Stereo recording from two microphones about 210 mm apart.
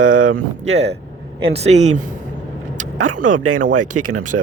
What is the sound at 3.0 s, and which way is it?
Speech, 90° right.